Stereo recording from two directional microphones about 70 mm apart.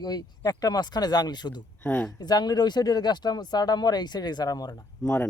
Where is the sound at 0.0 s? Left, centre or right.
Left.